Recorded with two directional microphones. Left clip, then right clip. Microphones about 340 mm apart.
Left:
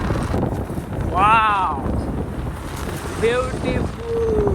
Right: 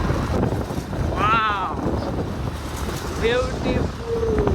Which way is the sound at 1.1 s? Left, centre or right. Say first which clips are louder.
Left 5 dB; centre.